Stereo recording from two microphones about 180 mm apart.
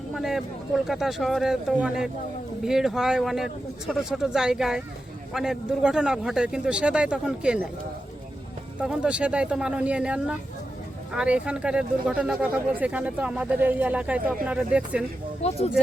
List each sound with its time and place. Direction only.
0.1 s a man's voice: centre (ahead or behind)
8.8 s speech: 5° right (ahead or behind)
15.4 s speech: 35° left (ahead or behind)